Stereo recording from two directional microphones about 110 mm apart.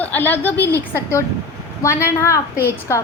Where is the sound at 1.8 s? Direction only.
25° left (ahead or behind).